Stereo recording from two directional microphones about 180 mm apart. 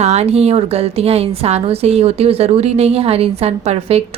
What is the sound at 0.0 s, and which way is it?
A woman's voice, 35° right (ahead or behind).